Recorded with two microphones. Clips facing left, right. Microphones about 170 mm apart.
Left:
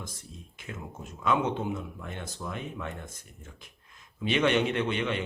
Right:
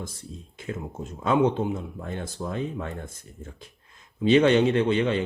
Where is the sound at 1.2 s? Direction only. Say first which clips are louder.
Right 6 dB; 30° right (ahead or behind).